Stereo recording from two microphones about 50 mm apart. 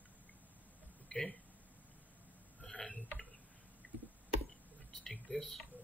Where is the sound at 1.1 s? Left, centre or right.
Centre.